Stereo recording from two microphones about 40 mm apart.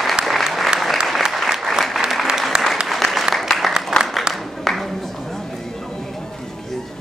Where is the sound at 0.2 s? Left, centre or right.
Centre.